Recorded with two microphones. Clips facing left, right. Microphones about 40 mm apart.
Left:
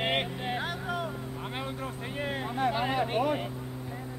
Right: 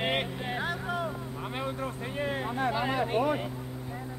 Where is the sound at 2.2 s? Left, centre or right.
Centre.